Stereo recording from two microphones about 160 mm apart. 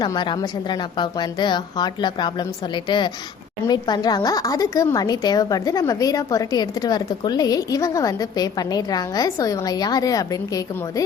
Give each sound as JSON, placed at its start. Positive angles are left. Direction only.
{"t": 0.0, "sound": "a woman's voice", "side_deg": 25}